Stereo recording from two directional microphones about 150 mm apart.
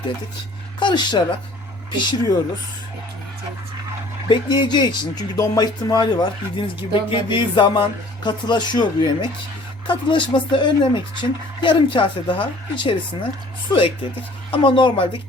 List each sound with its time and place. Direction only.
0.8 s speech: 30° left (ahead or behind)
4.3 s speech: 30° left (ahead or behind)